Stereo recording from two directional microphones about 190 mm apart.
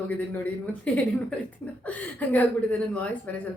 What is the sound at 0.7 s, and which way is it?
A woman's voice, 5° left (ahead or behind).